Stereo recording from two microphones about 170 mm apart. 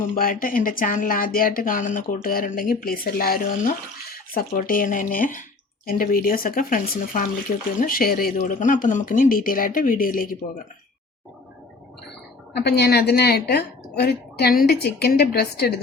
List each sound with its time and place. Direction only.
0.1 s speech: 55° left (ahead or behind)
12.5 s a woman's voice: 75° left (ahead or behind)